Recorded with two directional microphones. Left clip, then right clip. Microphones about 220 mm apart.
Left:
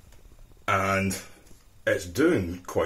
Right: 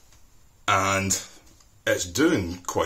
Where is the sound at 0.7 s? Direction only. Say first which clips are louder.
Right 3 dB; 25° right (ahead or behind).